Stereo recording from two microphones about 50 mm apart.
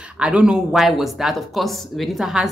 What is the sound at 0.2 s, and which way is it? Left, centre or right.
Speech, centre.